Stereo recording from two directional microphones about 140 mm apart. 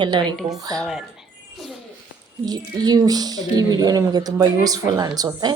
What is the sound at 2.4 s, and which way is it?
Speech, 30° right (ahead or behind).